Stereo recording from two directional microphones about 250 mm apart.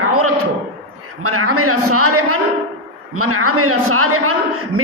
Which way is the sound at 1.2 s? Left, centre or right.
Right.